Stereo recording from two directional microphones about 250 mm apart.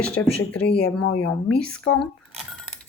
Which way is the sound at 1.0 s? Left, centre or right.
Left.